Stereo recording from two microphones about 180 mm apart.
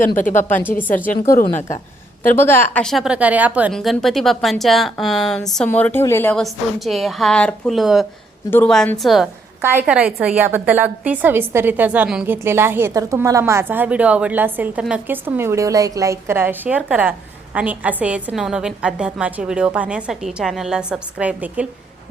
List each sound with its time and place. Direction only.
0.3 s a woman's voice: 45° left (ahead or behind)
0.8 s a woman's voice: 10° left (ahead or behind)
2.2 s a woman's voice: 10° left (ahead or behind)
2.8 s a woman's voice: centre (ahead or behind)
3.7 s speech: centre (ahead or behind)
9.6 s a woman's voice: 10° right (ahead or behind)